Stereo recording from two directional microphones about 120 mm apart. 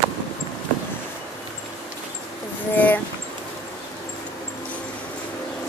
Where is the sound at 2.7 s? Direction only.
15° left (ahead or behind).